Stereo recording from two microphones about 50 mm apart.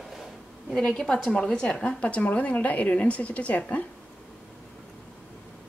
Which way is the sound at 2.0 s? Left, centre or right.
Left.